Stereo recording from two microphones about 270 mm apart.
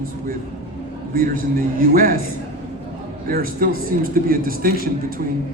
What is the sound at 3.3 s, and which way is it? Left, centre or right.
A man's voice, right.